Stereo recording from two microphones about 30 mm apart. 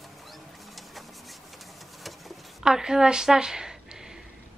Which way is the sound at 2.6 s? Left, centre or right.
Right.